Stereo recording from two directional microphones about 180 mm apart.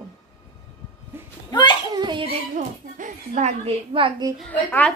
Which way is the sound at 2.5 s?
45° right (ahead or behind).